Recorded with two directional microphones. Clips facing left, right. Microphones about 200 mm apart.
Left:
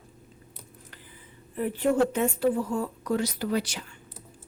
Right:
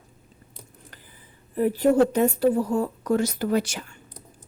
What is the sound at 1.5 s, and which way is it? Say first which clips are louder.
Speech: right 5 dB; 40° right (ahead or behind).